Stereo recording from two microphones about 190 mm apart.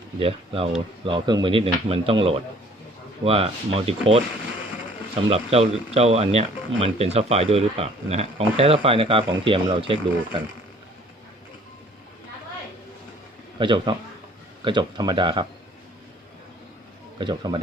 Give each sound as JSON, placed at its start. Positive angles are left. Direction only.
{"t": 0.2, "sound": "speech", "side_deg": -30}
{"t": 5.3, "sound": "speech", "side_deg": -30}
{"t": 13.6, "sound": "speech", "side_deg": -25}
{"t": 17.2, "sound": "speech", "side_deg": -25}